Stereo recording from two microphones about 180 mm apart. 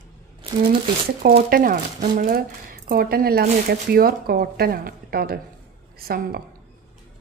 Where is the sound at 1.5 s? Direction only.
50° right (ahead or behind).